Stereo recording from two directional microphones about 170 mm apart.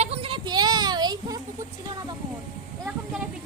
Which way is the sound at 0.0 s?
35° right (ahead or behind).